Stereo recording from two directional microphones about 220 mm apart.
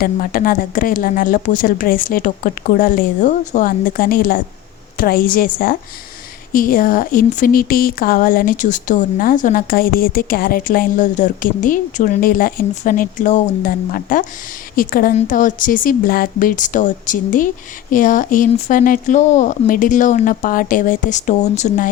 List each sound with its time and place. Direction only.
0.0 s speech: 40° left (ahead or behind)